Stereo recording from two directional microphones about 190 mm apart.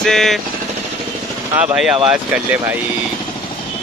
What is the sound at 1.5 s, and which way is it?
Speech, 5° right (ahead or behind).